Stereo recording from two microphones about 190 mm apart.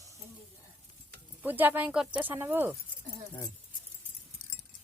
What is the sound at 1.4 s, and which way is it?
Speech, 10° right (ahead or behind).